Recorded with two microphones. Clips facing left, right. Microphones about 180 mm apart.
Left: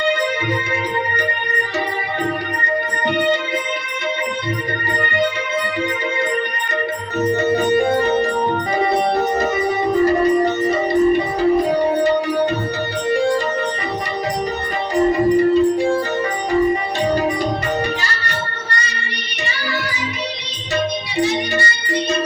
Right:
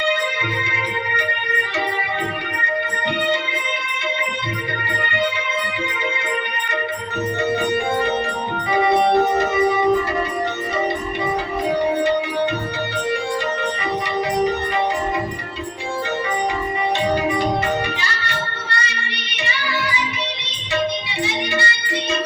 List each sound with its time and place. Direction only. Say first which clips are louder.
7.2 s music: left 4 dB; 40° left (ahead or behind)
18.0 s music: left 1 dB; 40° left (ahead or behind)
21.2 s music: left 6 dB; 40° left (ahead or behind)